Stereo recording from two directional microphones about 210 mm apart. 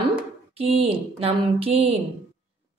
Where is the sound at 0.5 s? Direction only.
25° right (ahead or behind).